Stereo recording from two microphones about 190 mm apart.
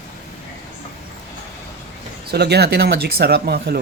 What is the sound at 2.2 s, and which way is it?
Speech, 60° right (ahead or behind).